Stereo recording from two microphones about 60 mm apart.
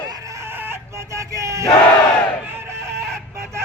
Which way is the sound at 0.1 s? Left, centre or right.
Right.